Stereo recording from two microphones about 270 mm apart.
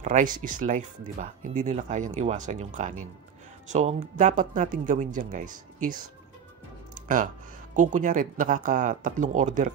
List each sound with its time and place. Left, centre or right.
0.0 s speech: right
7.7 s speech: right